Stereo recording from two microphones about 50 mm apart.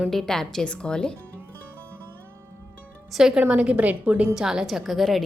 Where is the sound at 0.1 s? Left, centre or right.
Centre.